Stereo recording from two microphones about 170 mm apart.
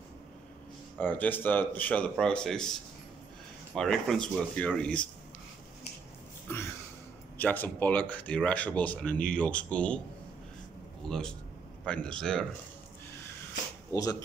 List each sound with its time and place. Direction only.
0.9 s speech: 10° left (ahead or behind)
7.3 s speech: 10° left (ahead or behind)
11.1 s speech: 5° left (ahead or behind)
13.9 s speech: 20° left (ahead or behind)